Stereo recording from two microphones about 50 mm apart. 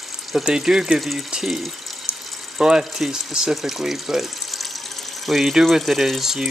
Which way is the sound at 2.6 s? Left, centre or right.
Centre.